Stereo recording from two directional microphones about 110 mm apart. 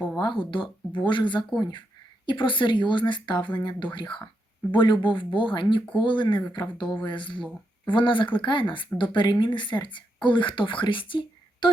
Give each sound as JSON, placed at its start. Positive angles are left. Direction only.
{"t": 0.2, "sound": "speech", "side_deg": 45}